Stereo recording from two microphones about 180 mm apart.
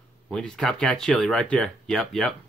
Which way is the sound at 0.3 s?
5° left (ahead or behind).